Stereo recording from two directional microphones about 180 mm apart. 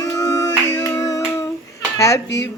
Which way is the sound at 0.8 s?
15° left (ahead or behind).